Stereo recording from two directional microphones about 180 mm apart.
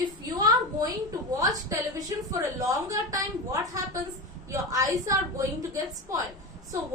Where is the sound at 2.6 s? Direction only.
20° right (ahead or behind).